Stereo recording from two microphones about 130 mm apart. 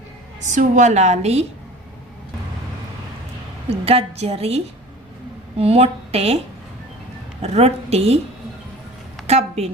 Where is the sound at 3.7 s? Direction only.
50° right (ahead or behind).